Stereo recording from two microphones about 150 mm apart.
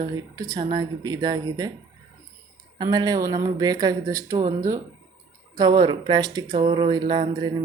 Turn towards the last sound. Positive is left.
turn(degrees=-30)  # may be behind; listen again after turning